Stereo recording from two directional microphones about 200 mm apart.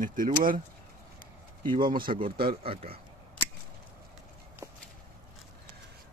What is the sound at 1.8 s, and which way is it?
Speech, 45° right (ahead or behind).